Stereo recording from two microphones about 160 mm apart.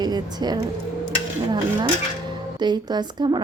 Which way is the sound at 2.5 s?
25° right (ahead or behind).